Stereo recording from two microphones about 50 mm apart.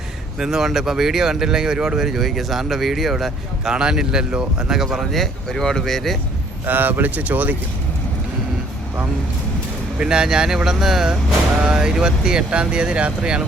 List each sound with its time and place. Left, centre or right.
0.3 s speech: centre
3.7 s speech: centre
5.5 s speech: centre
6.7 s speech: right
10.0 s speech: centre